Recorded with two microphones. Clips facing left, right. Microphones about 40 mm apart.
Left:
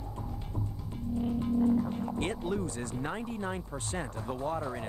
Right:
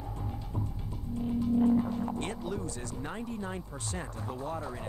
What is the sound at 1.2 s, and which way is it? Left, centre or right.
Music, left.